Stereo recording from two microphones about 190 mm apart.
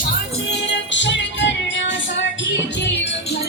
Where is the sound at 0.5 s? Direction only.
65° left (ahead or behind).